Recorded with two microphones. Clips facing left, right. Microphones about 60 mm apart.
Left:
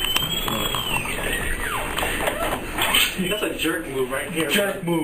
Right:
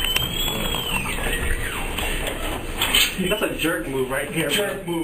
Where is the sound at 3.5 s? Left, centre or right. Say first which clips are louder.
Right 1 dB; right.